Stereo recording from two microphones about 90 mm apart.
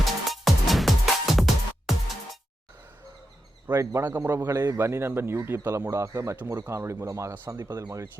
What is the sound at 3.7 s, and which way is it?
A man's voice, 35° right (ahead or behind).